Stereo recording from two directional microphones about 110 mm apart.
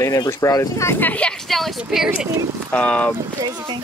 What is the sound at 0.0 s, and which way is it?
Speech, 30° left (ahead or behind).